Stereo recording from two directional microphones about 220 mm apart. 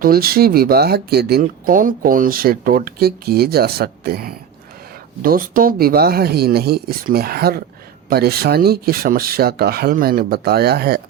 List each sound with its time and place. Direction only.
0.0 s speech: 45° right (ahead or behind)